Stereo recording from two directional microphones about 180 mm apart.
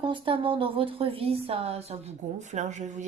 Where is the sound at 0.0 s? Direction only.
30° right (ahead or behind).